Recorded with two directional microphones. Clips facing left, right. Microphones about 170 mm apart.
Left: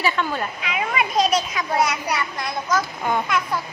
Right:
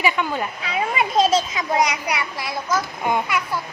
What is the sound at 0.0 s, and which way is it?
Speech, 15° right (ahead or behind).